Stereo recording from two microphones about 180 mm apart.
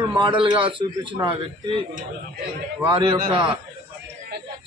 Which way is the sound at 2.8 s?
30° right (ahead or behind).